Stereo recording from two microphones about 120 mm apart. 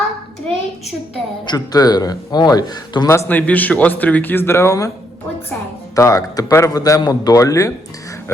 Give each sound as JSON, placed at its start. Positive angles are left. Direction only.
{"t": 1.5, "sound": "a man's voice", "side_deg": 30}
{"t": 3.1, "sound": "speech", "side_deg": 20}
{"t": 6.0, "sound": "a man's voice", "side_deg": 25}